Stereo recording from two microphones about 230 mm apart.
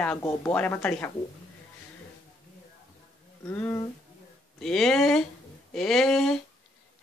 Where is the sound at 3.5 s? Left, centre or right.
Centre.